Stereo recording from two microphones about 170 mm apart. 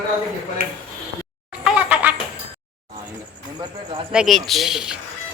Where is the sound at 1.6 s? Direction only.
5° right (ahead or behind).